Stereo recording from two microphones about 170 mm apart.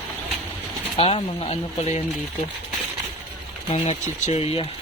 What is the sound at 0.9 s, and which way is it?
Speech, 35° left (ahead or behind).